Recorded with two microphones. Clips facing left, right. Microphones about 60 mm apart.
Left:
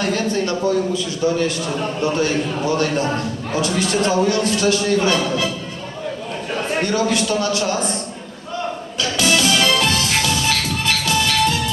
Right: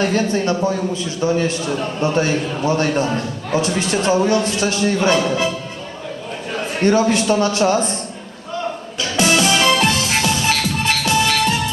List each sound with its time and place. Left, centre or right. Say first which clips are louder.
0.0 s a man's voice: right 2 dB; right
6.8 s a man's voice: right 7 dB; right
9.1 s music: right 2 dB; right